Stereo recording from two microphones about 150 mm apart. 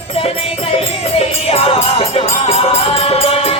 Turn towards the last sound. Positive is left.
turn(degrees=40)  # may be behind; listen again after turning